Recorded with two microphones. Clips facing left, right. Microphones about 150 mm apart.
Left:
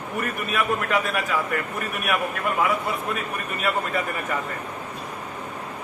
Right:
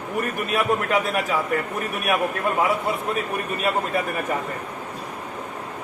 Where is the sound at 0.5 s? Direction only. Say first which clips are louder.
Right 2 dB; 25° right (ahead or behind).